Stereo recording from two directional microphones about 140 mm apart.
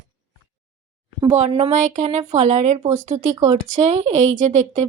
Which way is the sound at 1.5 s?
50° right (ahead or behind).